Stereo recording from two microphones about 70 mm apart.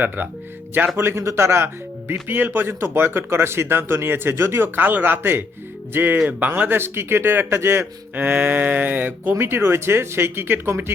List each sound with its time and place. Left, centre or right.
0.2 s speech: right
0.9 s speech: right
8.1 s speech: right